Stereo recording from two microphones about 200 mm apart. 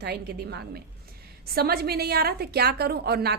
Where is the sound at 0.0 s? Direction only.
55° right (ahead or behind).